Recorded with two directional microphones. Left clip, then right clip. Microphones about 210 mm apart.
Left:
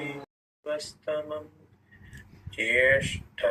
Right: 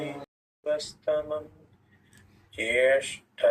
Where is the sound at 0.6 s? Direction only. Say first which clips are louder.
Right 4 dB; 20° left (ahead or behind).